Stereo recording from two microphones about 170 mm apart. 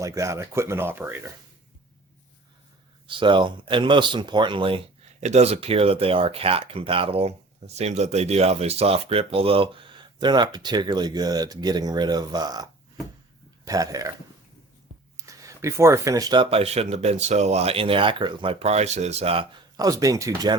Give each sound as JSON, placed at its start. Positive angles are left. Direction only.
{"t": 0.0, "sound": "speech", "side_deg": -20}
{"t": 3.1, "sound": "speech", "side_deg": -30}
{"t": 13.7, "sound": "speech", "side_deg": -20}
{"t": 15.3, "sound": "speech", "side_deg": -20}